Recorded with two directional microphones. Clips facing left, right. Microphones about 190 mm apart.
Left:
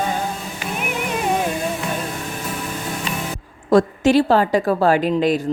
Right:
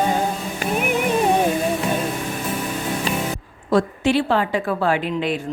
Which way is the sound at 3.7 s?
45° left (ahead or behind).